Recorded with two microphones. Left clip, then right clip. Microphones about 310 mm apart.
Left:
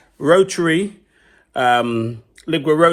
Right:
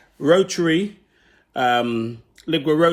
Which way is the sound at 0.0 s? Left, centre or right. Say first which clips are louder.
Left 3 dB; centre.